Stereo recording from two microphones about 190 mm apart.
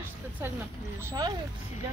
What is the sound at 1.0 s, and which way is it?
Speech, 20° right (ahead or behind).